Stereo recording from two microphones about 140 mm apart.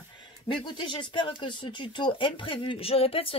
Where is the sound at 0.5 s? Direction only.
35° left (ahead or behind).